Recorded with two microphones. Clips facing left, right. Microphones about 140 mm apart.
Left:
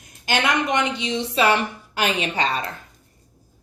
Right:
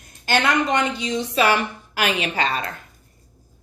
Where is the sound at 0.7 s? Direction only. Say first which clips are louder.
Right 1 dB; 20° left (ahead or behind).